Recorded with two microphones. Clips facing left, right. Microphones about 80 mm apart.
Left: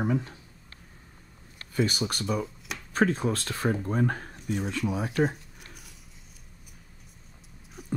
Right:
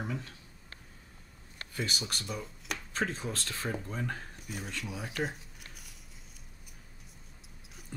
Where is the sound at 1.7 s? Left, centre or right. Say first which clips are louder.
Left 9 dB; left.